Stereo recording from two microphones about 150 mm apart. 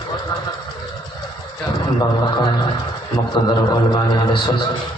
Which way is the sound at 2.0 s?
25° left (ahead or behind).